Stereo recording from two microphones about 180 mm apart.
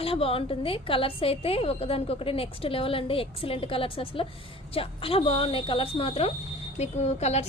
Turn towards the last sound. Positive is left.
turn(degrees=35)  # may be behind; listen again after turning